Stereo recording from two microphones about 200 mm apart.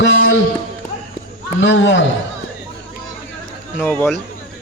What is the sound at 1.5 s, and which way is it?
Speech, 65° left (ahead or behind).